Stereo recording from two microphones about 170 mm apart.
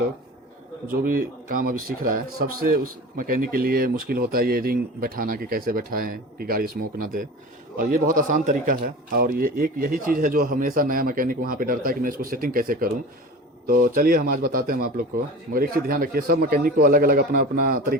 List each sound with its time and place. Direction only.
1.0 s a man's voice: 55° right (ahead or behind)